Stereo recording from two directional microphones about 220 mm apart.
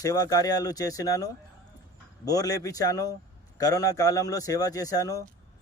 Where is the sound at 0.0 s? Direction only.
15° left (ahead or behind).